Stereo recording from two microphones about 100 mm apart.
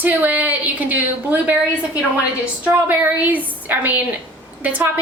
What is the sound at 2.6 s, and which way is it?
A woman's voice, 15° right (ahead or behind).